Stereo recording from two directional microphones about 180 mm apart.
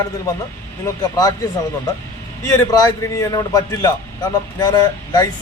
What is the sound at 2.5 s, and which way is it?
A man's voice, 20° left (ahead or behind).